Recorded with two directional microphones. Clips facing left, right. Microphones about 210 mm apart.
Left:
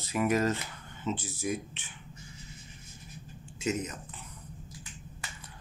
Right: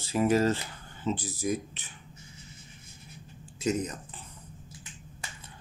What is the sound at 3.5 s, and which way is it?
Speech, 35° right (ahead or behind).